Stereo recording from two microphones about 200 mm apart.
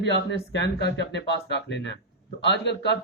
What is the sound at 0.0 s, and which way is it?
A man's voice, 60° left (ahead or behind).